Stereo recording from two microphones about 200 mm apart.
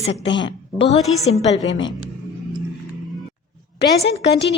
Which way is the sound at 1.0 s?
Centre (ahead or behind).